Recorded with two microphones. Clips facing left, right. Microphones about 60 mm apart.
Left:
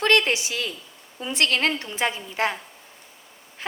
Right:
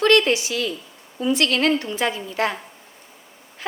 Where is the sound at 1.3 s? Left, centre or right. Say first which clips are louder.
Right 3 dB; left.